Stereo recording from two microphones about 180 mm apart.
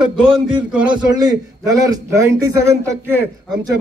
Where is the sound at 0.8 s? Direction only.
25° right (ahead or behind).